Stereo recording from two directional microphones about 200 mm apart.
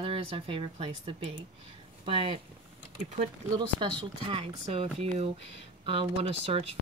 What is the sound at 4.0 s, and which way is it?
Speech, 25° right (ahead or behind).